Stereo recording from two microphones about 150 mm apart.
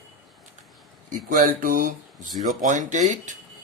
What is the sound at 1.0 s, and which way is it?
Speech, 65° right (ahead or behind).